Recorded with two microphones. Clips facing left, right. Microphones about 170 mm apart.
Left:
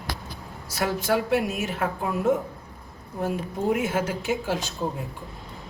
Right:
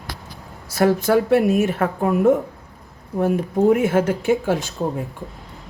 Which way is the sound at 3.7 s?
55° right (ahead or behind).